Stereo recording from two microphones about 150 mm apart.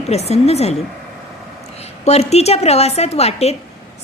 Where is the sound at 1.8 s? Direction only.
45° left (ahead or behind).